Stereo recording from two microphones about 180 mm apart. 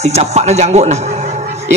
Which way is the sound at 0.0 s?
40° right (ahead or behind).